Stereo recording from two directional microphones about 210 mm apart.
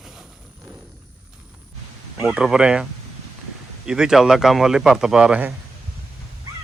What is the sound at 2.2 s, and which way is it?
Speech, 5° right (ahead or behind).